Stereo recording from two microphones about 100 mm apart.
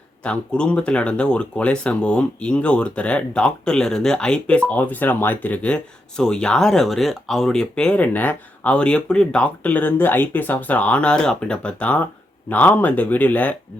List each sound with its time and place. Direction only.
0.2 s speech: 10° left (ahead or behind)